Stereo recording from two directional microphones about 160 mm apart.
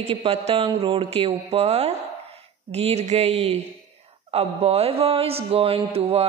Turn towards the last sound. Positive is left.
turn(degrees=-40)  # may be behind; listen again after turning